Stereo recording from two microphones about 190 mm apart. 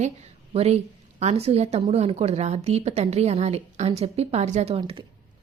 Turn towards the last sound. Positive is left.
turn(degrees=-30)  # may be behind; listen again after turning